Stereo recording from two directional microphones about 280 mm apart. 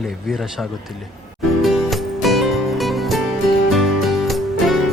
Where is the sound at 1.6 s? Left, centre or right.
Centre.